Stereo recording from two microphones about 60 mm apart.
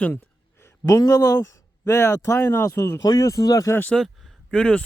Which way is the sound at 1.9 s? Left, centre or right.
Left.